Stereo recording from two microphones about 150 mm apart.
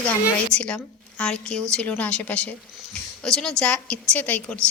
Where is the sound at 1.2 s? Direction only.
5° left (ahead or behind).